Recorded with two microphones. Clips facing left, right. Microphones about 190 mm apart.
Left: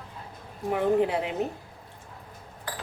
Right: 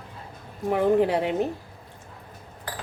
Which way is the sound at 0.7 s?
40° right (ahead or behind).